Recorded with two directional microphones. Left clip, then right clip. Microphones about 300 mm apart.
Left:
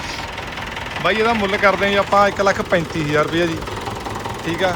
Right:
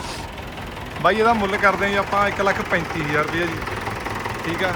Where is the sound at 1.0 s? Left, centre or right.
Centre.